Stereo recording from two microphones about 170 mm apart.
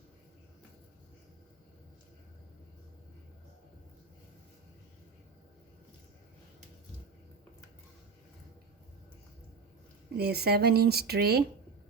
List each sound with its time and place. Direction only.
10.2 s speech: 70° right (ahead or behind)